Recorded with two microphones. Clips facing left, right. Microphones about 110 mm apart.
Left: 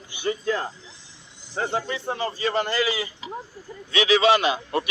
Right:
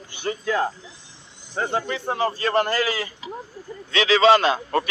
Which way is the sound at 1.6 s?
50° right (ahead or behind).